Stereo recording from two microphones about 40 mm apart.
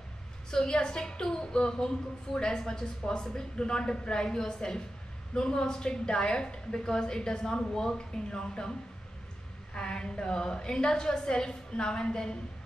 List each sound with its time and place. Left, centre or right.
0.5 s a woman's voice: centre
9.8 s a woman's voice: left